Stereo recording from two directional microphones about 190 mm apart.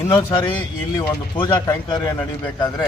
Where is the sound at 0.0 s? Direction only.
15° left (ahead or behind).